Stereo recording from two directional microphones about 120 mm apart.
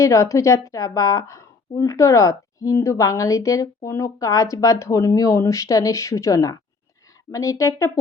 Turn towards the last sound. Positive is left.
turn(degrees=25)  # may be behind; listen again after turning